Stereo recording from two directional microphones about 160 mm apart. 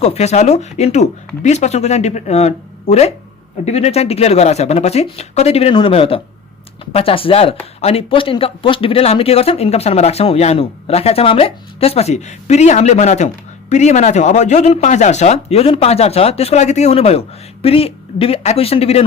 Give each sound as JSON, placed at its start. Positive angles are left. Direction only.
{"t": 0.0, "sound": "speech", "side_deg": 40}